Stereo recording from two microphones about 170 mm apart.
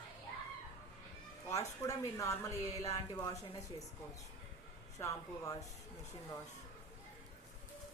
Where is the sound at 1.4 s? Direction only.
20° left (ahead or behind).